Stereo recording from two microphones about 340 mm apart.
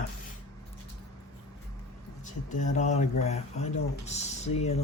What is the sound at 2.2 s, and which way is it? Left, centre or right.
Speech, left.